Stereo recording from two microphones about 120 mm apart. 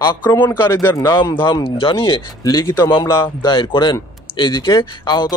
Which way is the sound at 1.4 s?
40° left (ahead or behind).